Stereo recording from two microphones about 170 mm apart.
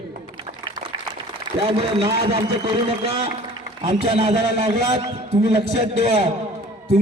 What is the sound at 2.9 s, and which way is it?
A man's voice, 35° right (ahead or behind).